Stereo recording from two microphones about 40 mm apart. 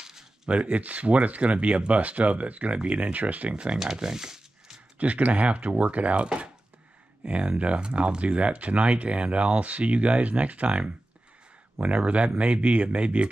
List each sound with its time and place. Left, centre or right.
0.5 s speech: right
3.5 s speech: right
3.8 s a sound: centre
4.9 s speech: right
6.2 s chopping: right
7.2 s speech: right